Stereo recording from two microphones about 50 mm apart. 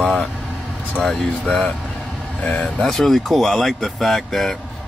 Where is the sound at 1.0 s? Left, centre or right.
Centre.